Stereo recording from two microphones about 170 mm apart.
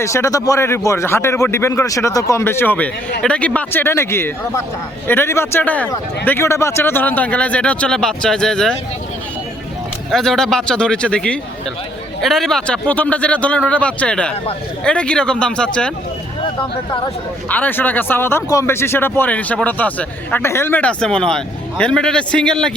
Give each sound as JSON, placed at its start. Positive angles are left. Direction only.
{"t": 0.0, "sound": "speech", "side_deg": 15}
{"t": 10.1, "sound": "speech", "side_deg": 5}
{"t": 17.5, "sound": "speech", "side_deg": 10}